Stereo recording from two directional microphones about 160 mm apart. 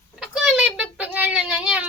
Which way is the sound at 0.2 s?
5° right (ahead or behind).